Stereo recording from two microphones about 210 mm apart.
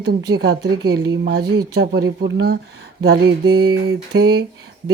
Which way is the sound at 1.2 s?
50° right (ahead or behind).